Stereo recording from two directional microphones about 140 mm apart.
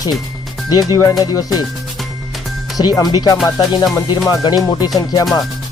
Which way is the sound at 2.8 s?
30° left (ahead or behind).